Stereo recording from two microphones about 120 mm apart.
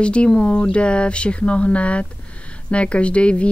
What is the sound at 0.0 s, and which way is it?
Speech, 10° left (ahead or behind).